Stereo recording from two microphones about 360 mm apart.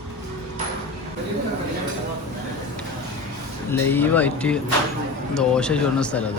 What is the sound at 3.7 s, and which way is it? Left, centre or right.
Speech, centre.